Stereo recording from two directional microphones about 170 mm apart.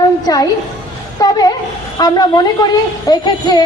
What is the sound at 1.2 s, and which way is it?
A woman's voice, 20° left (ahead or behind).